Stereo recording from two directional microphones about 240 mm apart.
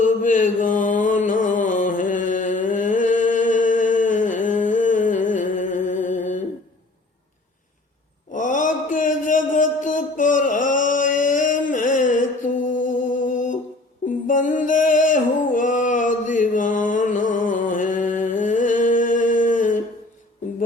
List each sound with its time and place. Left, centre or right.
0.0 s mantra: left
5.3 s music: left
8.3 s mantra: left
14.3 s music: left